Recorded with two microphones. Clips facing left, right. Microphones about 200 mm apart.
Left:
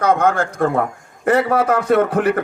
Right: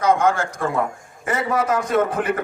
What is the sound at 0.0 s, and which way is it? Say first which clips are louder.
A man's voice: left 2 dB; 60° left (ahead or behind).